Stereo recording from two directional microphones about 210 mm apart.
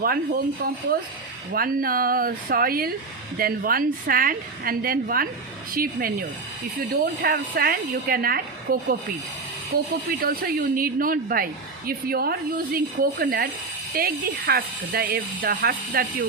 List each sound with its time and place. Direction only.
0.0 s speech: 45° right (ahead or behind)